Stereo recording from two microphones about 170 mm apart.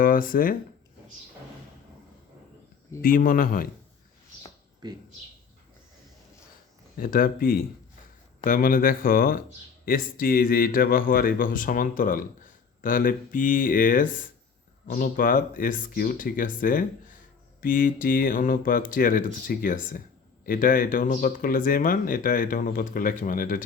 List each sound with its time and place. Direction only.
0.0 s speech: 55° left (ahead or behind)
3.0 s speech: 55° left (ahead or behind)
4.8 s speech: 25° right (ahead or behind)
6.9 s speech: 55° left (ahead or behind)